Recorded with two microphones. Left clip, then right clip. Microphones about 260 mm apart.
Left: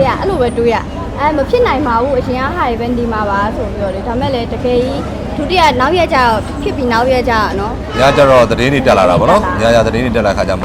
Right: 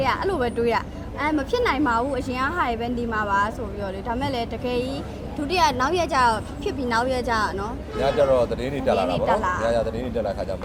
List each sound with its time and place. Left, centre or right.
0.0 s a sound: right
1.2 s speech: right
8.0 s speech: left